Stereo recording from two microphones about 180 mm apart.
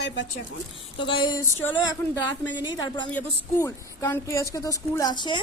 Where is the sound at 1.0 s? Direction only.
25° left (ahead or behind).